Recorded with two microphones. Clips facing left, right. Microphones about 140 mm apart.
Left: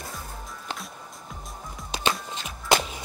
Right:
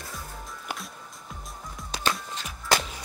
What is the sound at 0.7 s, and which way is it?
Music, centre (ahead or behind).